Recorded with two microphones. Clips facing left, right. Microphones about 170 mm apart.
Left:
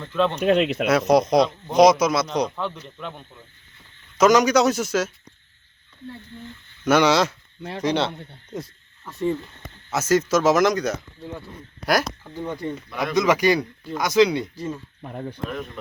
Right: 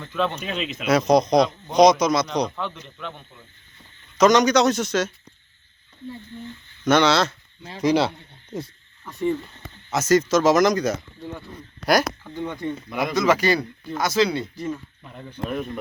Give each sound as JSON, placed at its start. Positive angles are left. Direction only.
{"t": 0.1, "sound": "speech", "side_deg": -5}
{"t": 0.3, "sound": "speech", "side_deg": 65}
{"t": 0.9, "sound": "speech", "side_deg": 5}
{"t": 6.8, "sound": "speech", "side_deg": 10}
{"t": 7.8, "sound": "speech", "side_deg": -10}
{"t": 12.3, "sound": "speech", "side_deg": 10}
{"t": 12.9, "sound": "speech", "side_deg": -10}
{"t": 13.1, "sound": "speech", "side_deg": 15}
{"t": 15.0, "sound": "speech", "side_deg": 50}
{"t": 15.4, "sound": "speech", "side_deg": -10}